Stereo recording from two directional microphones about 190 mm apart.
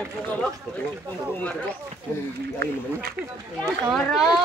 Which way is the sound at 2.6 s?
55° right (ahead or behind).